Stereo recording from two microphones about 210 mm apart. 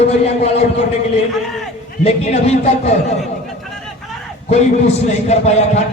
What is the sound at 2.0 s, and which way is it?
Speech, 30° left (ahead or behind).